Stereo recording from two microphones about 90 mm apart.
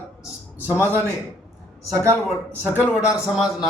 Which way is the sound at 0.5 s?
20° right (ahead or behind).